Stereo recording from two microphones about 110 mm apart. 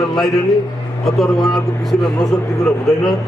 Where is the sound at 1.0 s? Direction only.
Centre (ahead or behind).